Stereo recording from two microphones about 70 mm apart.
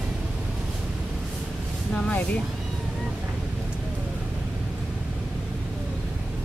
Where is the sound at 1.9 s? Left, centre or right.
Centre.